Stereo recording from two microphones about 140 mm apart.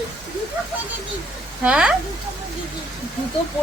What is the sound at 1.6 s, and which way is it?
Speech, 5° right (ahead or behind).